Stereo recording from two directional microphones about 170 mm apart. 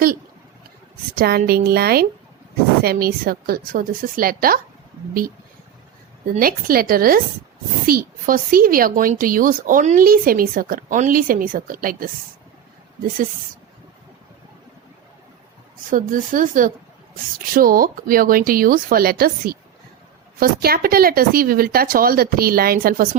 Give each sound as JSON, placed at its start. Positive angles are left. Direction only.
{"t": 1.1, "sound": "a woman's voice", "side_deg": -65}
{"t": 6.3, "sound": "a woman's voice", "side_deg": -60}
{"t": 15.9, "sound": "a woman's voice", "side_deg": -50}